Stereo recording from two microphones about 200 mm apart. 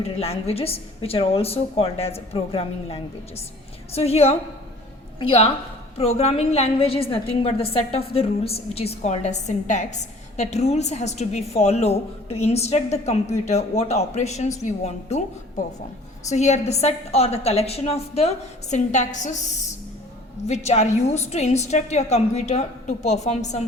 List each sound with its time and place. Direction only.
0.0 s a woman's voice: 30° left (ahead or behind)
16.3 s a woman's voice: 35° left (ahead or behind)
20.5 s a woman's voice: 35° left (ahead or behind)